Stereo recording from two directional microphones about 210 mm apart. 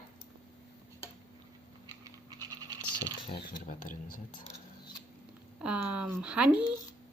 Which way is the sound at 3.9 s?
90° left.